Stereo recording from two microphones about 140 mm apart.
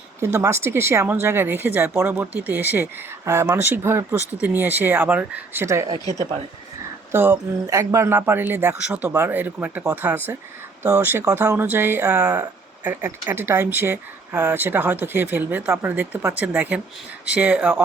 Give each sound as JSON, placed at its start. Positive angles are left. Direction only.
{"t": 0.3, "sound": "speech", "side_deg": -20}
{"t": 7.1, "sound": "speech", "side_deg": -15}
{"t": 12.8, "sound": "speech", "side_deg": -15}